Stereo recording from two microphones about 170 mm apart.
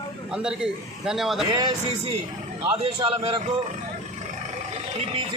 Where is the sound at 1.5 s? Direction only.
25° right (ahead or behind).